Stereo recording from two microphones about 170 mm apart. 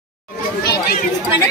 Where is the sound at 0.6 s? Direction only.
70° left (ahead or behind).